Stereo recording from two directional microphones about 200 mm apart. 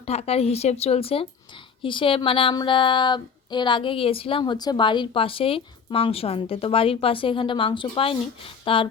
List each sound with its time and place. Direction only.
0.0 s a woman's voice: 30° left (ahead or behind)